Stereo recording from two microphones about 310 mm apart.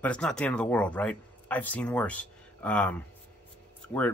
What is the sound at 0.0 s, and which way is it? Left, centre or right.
Speech, centre.